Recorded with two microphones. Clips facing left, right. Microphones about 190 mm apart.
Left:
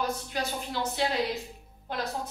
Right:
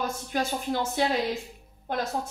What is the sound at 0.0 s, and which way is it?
Speech, 45° right (ahead or behind).